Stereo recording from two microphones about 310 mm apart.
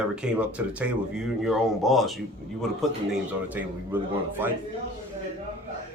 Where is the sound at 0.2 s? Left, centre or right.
Centre.